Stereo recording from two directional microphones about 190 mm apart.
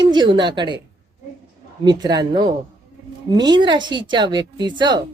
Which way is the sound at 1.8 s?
20° right (ahead or behind).